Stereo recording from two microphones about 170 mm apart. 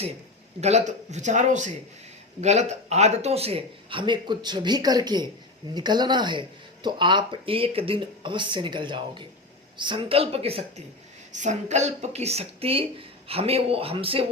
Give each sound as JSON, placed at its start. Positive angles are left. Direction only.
{"t": 0.6, "sound": "a man's voice", "side_deg": -40}